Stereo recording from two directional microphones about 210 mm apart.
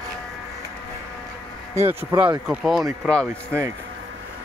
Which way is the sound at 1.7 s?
10° right (ahead or behind).